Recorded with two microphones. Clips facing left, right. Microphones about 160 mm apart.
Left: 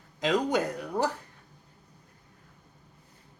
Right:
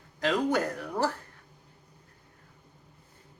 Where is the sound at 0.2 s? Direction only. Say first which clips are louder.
Left 1 dB; 15° left (ahead or behind).